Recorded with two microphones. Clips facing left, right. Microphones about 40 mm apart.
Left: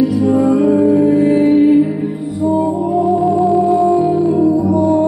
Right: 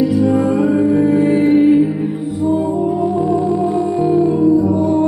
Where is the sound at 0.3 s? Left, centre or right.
Right.